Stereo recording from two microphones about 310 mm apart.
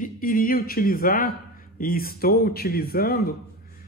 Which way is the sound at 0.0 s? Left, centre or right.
Left.